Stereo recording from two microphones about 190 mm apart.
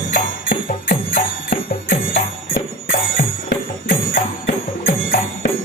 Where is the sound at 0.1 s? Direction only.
45° left (ahead or behind).